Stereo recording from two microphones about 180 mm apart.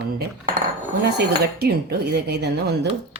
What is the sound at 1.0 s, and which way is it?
Speech, 65° right (ahead or behind).